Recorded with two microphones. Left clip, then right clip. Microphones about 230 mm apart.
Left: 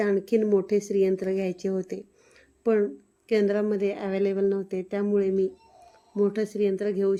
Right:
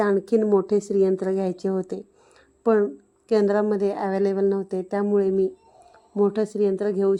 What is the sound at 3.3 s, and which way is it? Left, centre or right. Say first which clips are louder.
Speech: right 4 dB; centre.